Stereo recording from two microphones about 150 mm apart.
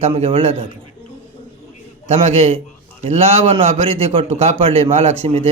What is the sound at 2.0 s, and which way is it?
A man's voice, 45° right (ahead or behind).